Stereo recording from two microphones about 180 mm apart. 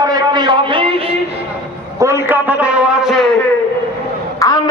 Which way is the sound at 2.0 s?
15° right (ahead or behind).